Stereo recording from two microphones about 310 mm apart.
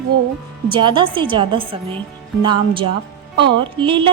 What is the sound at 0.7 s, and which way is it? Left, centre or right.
A woman's voice, centre.